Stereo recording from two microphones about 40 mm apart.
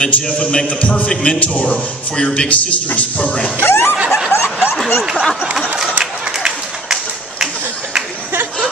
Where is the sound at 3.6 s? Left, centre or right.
Left.